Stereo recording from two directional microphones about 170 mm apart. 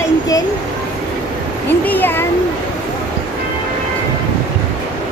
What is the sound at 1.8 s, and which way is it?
Speech, 10° left (ahead or behind).